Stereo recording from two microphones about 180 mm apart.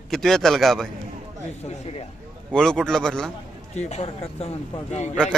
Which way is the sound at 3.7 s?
40° left (ahead or behind).